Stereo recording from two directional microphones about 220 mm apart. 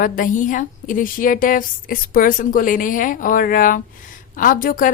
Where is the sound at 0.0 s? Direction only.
40° left (ahead or behind).